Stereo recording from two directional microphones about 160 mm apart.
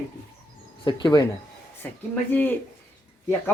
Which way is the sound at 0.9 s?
30° left (ahead or behind).